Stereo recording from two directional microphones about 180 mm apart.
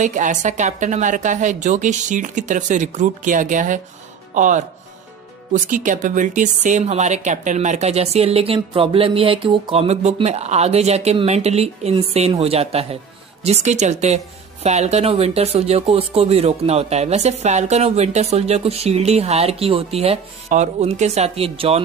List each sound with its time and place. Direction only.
0.0 s a woman's voice: 45° right (ahead or behind)